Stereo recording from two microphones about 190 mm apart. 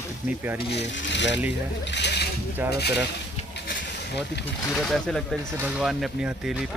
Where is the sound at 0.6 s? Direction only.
60° left (ahead or behind).